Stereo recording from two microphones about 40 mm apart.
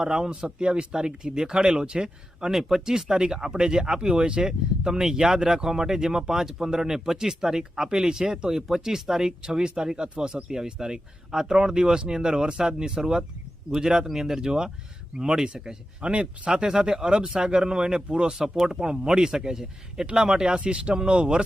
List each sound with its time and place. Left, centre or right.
0.0 s speech: centre
2.6 s speech: centre; by 21.4 s right